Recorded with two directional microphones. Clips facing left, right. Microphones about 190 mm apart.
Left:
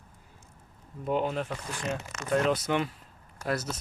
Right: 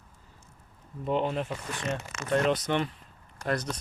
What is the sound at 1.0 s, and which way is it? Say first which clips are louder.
Speech: right 1 dB; 5° left (ahead or behind).